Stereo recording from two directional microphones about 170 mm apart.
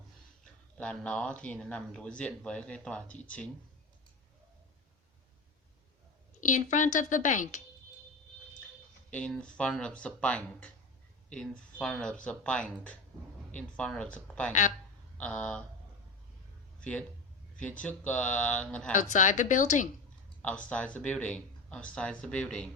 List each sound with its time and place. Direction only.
0.8 s speech: 5° left (ahead or behind)
6.4 s a woman's voice: 50° left (ahead or behind)
9.0 s speech: 5° left (ahead or behind)
11.8 s speech: 5° left (ahead or behind)
17.8 s speech: 5° left (ahead or behind)
18.9 s a woman's voice: 45° left (ahead or behind)
20.4 s speech: 10° left (ahead or behind)